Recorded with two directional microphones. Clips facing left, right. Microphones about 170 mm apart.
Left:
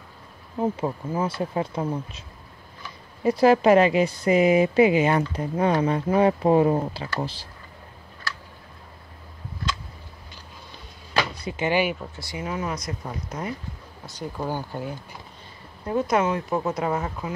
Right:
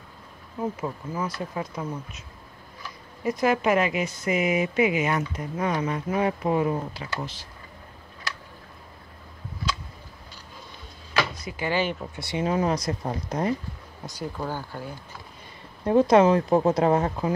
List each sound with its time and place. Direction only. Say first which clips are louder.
0.6 s speech: left 4 dB; 30° left (ahead or behind)
3.3 s speech: left 6 dB; 30° left (ahead or behind)
11.4 s speech: left 3 dB; 20° left (ahead or behind)
12.2 s speech: right 10 dB; 25° right (ahead or behind)
14.3 s speech: left 7 dB; 15° left (ahead or behind)
15.8 s speech: right 5 dB; 30° right (ahead or behind)